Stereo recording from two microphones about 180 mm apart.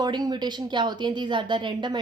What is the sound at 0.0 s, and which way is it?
Speech, 25° right (ahead or behind).